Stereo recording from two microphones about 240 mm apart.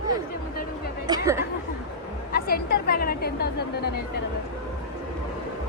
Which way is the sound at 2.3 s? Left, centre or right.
Left.